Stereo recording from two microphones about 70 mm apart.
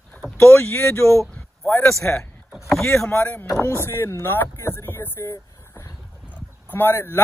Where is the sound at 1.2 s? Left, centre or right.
Left.